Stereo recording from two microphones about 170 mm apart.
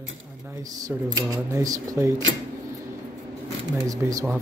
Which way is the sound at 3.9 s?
20° right (ahead or behind).